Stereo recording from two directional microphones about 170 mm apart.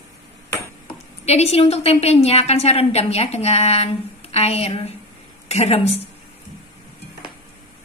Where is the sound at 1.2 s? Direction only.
40° left (ahead or behind).